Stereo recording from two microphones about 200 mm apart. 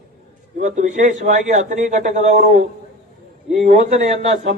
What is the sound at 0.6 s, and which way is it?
Speech, 40° right (ahead or behind).